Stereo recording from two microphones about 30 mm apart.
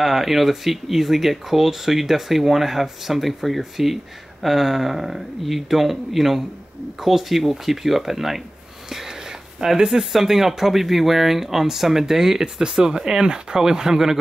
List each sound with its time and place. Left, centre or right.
0.0 s speech: centre
8.8 s a sound: centre
9.8 s speech: centre